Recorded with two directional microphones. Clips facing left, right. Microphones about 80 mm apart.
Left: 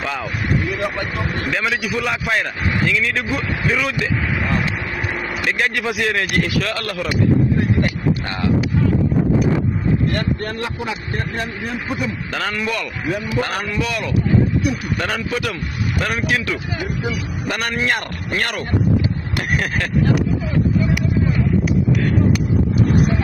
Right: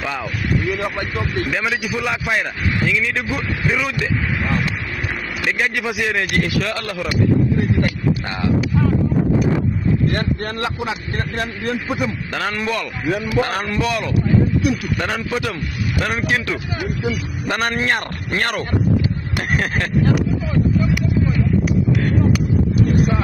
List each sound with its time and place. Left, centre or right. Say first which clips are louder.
1.1 s speech: right 1 dB; left
1.5 s a man's voice: left 1 dB; centre
3.0 s a man's voice: left 1 dB; centre
3.6 s speech: even; centre
5.8 s a man's voice: left 1 dB; centre
10.6 s speech: right 2 dB; right
12.5 s a man's voice: right 1 dB; right
15.0 s a man's voice: even; centre
16.1 s a man's voice: even; right